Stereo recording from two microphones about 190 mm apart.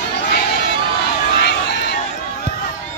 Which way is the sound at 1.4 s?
60° left (ahead or behind).